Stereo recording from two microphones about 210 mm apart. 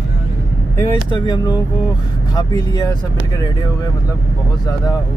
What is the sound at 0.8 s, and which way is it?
Speech, 15° left (ahead or behind).